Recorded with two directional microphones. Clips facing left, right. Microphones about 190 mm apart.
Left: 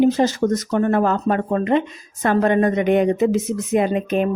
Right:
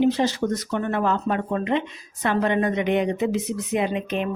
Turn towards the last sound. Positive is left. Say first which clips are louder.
# left 6 dB
turn(degrees=45)  # may be behind; listen again after turning